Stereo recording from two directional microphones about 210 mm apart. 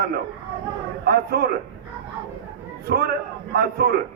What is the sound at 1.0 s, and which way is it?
Speech, 45° right (ahead or behind).